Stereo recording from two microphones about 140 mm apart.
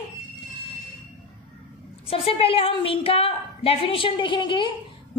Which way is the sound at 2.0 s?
45° left (ahead or behind).